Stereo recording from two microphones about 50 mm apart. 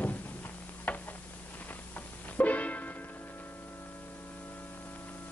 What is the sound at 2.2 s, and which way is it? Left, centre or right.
Music, left.